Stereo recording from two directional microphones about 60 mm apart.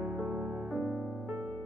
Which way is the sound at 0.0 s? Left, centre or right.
Right.